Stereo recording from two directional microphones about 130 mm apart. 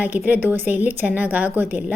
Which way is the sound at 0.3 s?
15° right (ahead or behind).